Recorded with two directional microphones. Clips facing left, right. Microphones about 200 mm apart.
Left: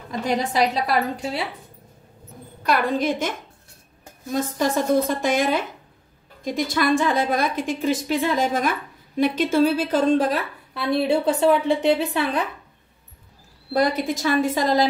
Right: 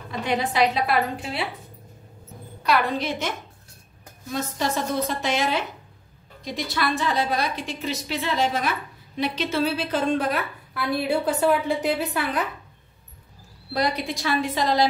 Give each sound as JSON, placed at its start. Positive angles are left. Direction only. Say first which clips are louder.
{"t": 0.2, "sound": "a woman's voice", "louder": "left 1 dB", "side_deg": 40}
{"t": 2.6, "sound": "a woman's voice", "louder": "left 2 dB", "side_deg": 50}
{"t": 13.7, "sound": "a woman's voice", "louder": "left 4 dB", "side_deg": 50}